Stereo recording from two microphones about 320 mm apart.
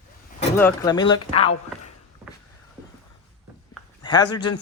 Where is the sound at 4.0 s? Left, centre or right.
Centre.